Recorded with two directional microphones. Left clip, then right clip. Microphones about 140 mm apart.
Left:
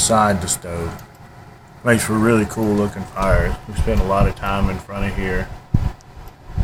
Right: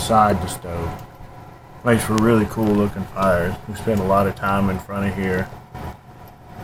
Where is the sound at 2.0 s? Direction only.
5° left (ahead or behind).